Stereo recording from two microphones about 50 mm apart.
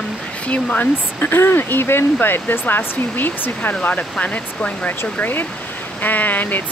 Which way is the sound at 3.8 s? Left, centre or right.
Left.